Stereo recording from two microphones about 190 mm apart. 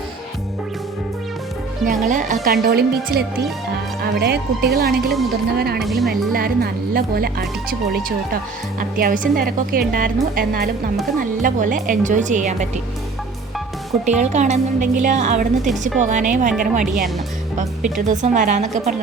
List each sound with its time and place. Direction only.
1.8 s speech: 45° right (ahead or behind)
5.8 s speech: centre (ahead or behind)
6.1 s speech: 50° right (ahead or behind)
14.2 s a woman's voice: 40° right (ahead or behind)